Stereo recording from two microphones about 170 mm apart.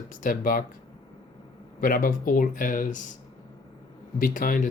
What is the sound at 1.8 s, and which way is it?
Speech, 55° left (ahead or behind).